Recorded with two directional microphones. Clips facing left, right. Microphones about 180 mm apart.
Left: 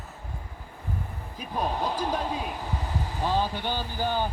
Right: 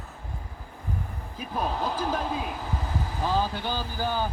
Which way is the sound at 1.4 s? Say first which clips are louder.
Even; 15° left (ahead or behind).